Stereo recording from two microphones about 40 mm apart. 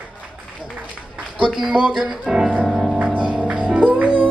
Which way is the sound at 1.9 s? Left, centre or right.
Centre.